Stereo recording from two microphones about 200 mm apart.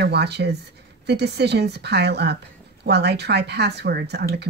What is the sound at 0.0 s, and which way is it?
A woman's voice, 55° right (ahead or behind).